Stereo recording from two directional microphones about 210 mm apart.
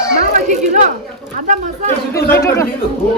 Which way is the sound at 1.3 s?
40° right (ahead or behind).